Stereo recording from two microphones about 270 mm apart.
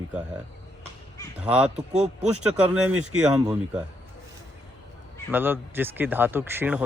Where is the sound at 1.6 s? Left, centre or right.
Right.